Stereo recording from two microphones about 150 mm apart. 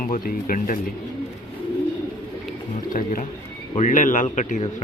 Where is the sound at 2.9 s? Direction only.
65° left (ahead or behind).